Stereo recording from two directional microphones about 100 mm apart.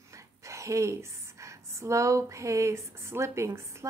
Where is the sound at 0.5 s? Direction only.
30° right (ahead or behind).